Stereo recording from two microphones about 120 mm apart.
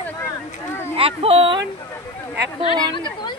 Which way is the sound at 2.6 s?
45° left (ahead or behind).